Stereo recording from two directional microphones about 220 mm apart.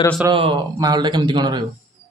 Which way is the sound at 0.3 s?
20° right (ahead or behind).